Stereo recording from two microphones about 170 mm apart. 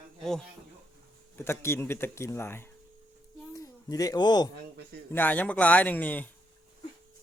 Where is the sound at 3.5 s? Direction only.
20° left (ahead or behind).